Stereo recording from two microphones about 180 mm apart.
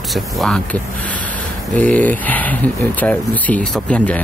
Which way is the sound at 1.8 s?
10° left (ahead or behind).